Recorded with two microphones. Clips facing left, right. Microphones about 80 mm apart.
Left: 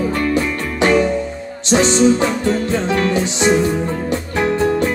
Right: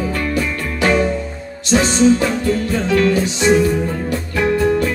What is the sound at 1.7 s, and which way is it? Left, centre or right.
Music, left.